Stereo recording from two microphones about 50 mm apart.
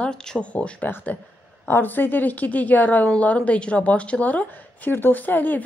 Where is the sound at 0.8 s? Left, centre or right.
Left.